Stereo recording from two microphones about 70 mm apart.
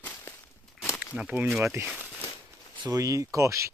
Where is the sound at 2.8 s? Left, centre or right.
Right.